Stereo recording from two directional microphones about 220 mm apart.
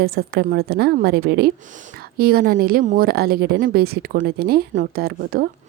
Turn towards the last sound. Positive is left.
turn(degrees=-40)  # may be behind; listen again after turning